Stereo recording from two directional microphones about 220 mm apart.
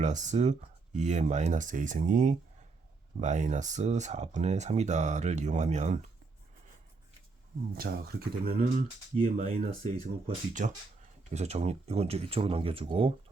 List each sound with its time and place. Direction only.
0.0 s speech: 35° right (ahead or behind)
7.8 s speech: 45° right (ahead or behind)
9.1 s speech: 30° right (ahead or behind)